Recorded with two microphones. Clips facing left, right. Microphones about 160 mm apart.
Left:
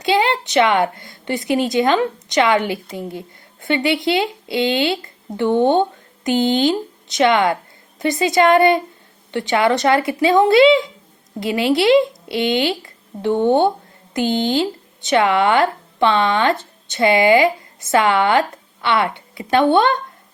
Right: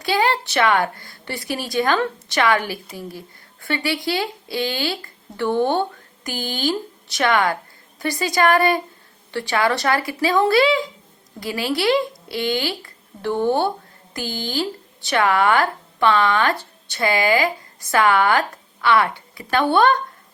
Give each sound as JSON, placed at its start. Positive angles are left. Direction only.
{"t": 0.0, "sound": "a woman's voice", "side_deg": 20}